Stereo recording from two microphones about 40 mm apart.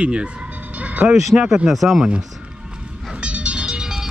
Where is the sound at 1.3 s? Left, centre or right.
Centre.